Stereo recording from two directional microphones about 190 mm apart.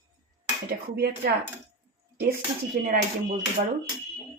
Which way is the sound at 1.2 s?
60° right (ahead or behind).